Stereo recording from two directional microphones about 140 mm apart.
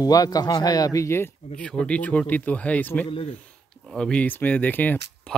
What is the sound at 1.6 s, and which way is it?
Speech, 5° left (ahead or behind).